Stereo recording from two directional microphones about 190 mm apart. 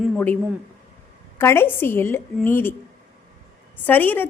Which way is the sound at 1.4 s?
10° left (ahead or behind).